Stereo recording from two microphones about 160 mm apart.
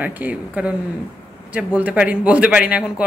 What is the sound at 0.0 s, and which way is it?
Speech, 10° right (ahead or behind).